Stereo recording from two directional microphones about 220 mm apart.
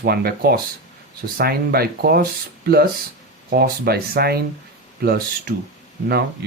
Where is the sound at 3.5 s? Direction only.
45° right (ahead or behind).